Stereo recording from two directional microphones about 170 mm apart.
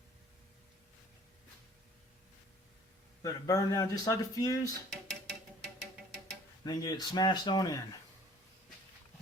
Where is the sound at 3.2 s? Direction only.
20° left (ahead or behind).